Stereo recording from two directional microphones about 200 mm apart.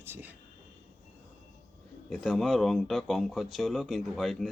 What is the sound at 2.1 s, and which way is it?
Speech, centre (ahead or behind).